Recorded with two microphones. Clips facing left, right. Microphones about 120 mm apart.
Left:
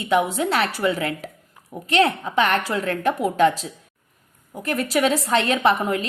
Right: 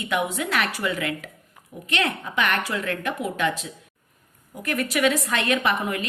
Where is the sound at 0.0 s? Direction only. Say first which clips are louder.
Left 5 dB; 30° left (ahead or behind).